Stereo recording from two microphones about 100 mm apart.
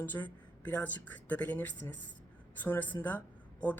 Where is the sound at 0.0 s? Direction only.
15° left (ahead or behind).